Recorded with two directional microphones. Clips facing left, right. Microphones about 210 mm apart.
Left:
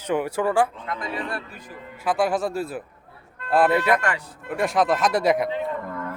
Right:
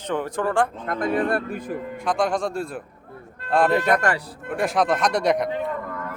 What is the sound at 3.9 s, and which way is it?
Speech, 40° right (ahead or behind).